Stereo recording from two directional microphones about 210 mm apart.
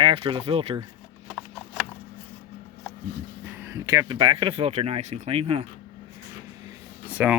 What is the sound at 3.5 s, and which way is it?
Speech, 15° right (ahead or behind).